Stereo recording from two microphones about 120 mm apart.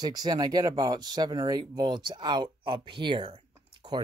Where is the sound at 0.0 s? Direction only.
35° right (ahead or behind).